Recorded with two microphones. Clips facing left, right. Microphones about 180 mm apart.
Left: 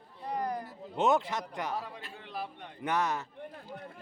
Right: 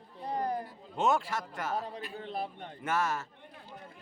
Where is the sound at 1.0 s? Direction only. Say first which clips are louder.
Left 2 dB; 20° left (ahead or behind).